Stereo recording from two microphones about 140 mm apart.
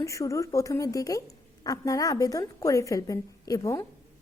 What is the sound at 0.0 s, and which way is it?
Speech, 20° left (ahead or behind).